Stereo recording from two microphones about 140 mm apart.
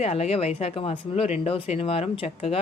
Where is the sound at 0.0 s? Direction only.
45° left (ahead or behind).